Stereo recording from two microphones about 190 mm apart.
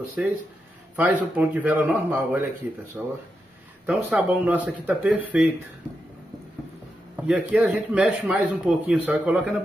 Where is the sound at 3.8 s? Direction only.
10° right (ahead or behind).